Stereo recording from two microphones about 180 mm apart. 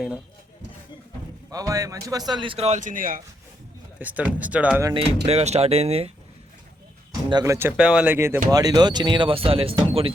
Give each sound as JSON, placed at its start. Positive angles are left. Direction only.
{"t": 1.5, "sound": "a man's voice", "side_deg": -20}
{"t": 4.0, "sound": "speech", "side_deg": -10}
{"t": 5.2, "sound": "speech", "side_deg": -35}
{"t": 7.3, "sound": "speech", "side_deg": -20}
{"t": 7.8, "sound": "a man's voice", "side_deg": -5}